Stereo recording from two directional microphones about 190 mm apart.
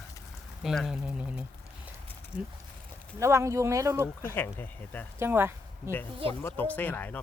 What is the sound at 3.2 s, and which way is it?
Speech, 15° right (ahead or behind).